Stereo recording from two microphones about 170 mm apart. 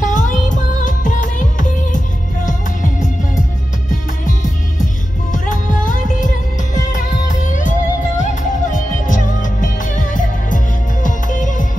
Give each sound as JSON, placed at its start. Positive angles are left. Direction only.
{"t": 0.0, "sound": "music of bollywood", "side_deg": 45}
{"t": 4.3, "sound": "music", "side_deg": 50}